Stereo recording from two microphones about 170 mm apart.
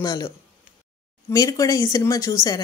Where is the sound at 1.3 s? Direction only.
20° left (ahead or behind).